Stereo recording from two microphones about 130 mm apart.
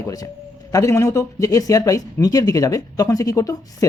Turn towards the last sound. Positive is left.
turn(degrees=25)  # may be behind; listen again after turning